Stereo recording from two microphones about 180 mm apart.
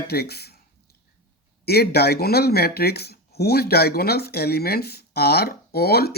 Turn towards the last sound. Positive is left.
turn(degrees=60)  # may be behind; listen again after turning